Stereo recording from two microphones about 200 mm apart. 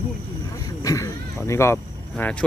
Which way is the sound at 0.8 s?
15° left (ahead or behind).